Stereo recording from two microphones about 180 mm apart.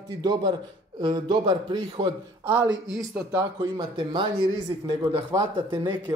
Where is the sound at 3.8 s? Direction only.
25° right (ahead or behind).